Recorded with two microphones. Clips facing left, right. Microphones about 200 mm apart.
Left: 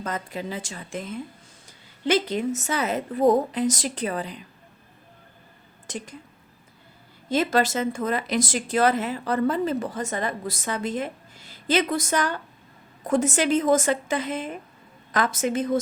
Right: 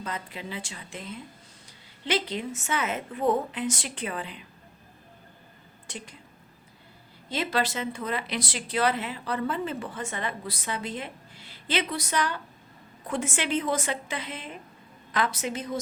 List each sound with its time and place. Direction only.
0.0 s a woman's voice: 45° left (ahead or behind)
5.9 s speech: 45° left (ahead or behind)
7.3 s speech: 45° left (ahead or behind)